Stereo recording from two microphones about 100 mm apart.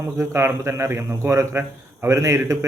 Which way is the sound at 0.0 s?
25° right (ahead or behind).